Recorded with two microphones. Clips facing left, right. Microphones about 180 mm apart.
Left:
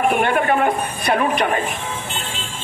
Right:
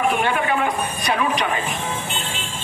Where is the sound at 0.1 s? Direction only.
50° left (ahead or behind).